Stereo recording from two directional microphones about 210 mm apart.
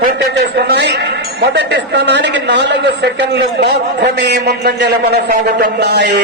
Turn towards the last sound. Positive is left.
turn(degrees=-55)  # may be behind; listen again after turning